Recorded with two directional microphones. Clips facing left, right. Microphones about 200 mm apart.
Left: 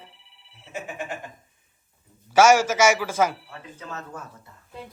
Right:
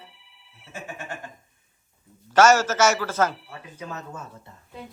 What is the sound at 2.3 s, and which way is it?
A man's voice, 10° left (ahead or behind).